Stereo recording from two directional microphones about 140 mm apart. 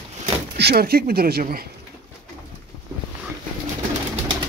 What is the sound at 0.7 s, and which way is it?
Speech, 90° right.